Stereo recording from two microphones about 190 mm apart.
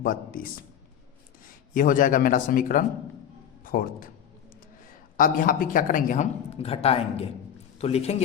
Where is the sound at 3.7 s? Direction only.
45° left (ahead or behind).